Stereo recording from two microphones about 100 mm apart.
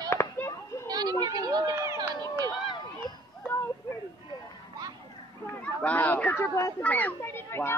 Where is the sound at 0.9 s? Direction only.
45° right (ahead or behind).